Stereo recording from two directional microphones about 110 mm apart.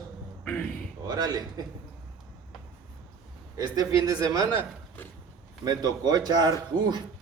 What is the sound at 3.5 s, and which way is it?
A man's voice, 35° right (ahead or behind).